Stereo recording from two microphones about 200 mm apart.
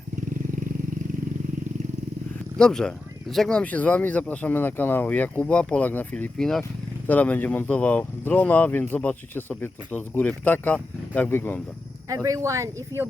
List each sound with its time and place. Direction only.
2.6 s speech: 5° left (ahead or behind)
12.0 s speech: 15° right (ahead or behind)